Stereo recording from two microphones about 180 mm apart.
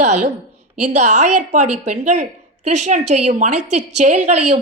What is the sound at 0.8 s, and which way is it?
A woman's voice, 40° right (ahead or behind).